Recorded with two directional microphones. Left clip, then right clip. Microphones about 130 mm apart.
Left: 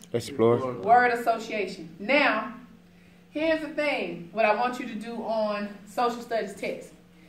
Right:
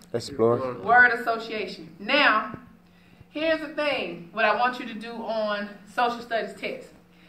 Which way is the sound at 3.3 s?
35° left (ahead or behind).